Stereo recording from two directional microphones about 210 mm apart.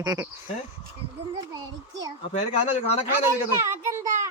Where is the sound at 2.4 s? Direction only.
30° left (ahead or behind).